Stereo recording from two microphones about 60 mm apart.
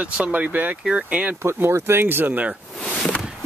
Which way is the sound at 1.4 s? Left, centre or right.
Right.